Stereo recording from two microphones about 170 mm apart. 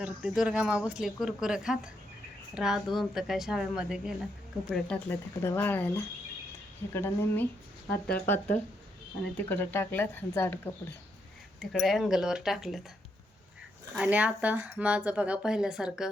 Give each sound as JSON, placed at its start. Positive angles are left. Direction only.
{"t": 0.0, "sound": "speech", "side_deg": -5}
{"t": 11.7, "sound": "speech", "side_deg": 0}
{"t": 13.9, "sound": "speech", "side_deg": -5}